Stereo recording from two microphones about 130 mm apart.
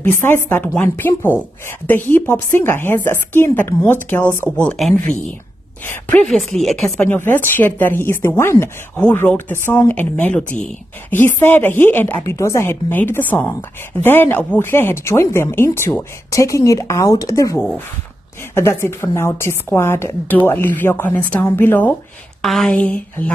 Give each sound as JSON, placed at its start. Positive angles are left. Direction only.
{"t": 0.0, "sound": "a woman's voice", "side_deg": 15}
{"t": 5.9, "sound": "a woman's voice", "side_deg": 15}
{"t": 6.2, "sound": "speech", "side_deg": 0}
{"t": 7.1, "sound": "a woman's voice", "side_deg": 15}
{"t": 22.4, "sound": "a woman's voice", "side_deg": 5}